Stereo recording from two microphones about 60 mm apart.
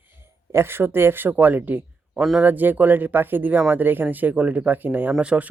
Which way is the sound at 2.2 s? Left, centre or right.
Centre.